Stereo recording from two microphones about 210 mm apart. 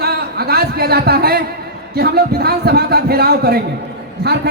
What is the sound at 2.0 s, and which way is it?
Speech, 50° right (ahead or behind).